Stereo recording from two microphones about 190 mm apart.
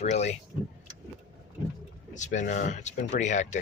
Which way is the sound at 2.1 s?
40° left (ahead or behind).